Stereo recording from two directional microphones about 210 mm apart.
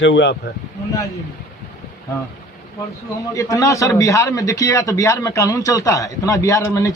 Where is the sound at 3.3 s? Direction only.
15° left (ahead or behind).